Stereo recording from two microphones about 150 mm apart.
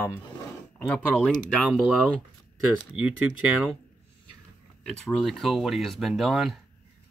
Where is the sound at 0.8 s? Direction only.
5° left (ahead or behind).